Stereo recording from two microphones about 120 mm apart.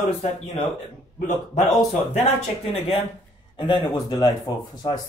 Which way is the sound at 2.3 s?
55° left (ahead or behind).